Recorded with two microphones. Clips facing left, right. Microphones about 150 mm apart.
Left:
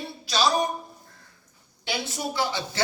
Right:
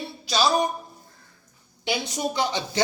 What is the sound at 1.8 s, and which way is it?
Speech, 20° right (ahead or behind).